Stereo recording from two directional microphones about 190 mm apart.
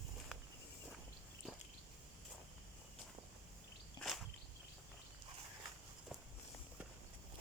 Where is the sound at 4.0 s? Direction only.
Centre (ahead or behind).